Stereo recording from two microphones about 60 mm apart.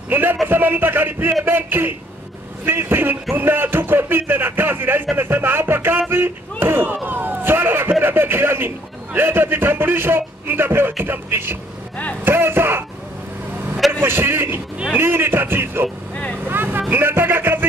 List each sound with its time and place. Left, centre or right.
0.1 s a man's voice: right
14.0 s a man's voice: right
16.4 s vehicle: right
16.9 s speech: right